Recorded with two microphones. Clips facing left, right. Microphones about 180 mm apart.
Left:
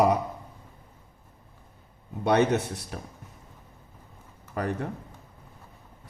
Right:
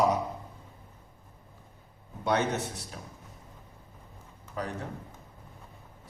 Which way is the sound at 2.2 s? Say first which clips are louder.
Left 6 dB; 60° left (ahead or behind).